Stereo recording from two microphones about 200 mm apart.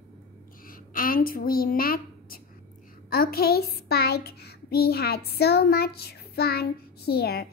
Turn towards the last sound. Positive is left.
turn(degrees=50)  # may be behind; listen again after turning